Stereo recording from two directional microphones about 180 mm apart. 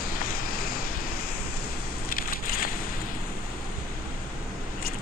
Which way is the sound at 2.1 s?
55° left (ahead or behind).